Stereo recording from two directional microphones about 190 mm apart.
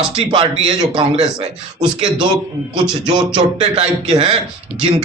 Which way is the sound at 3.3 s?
25° right (ahead or behind).